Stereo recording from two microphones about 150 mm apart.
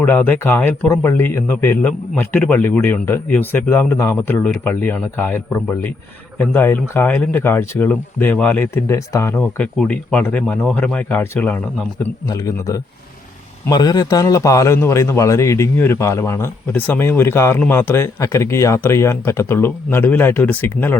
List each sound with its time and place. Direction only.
0.0 s a man's voice: 10° left (ahead or behind)
9.4 s a man's voice: 5° left (ahead or behind)
12.3 s a man's voice: 20° left (ahead or behind)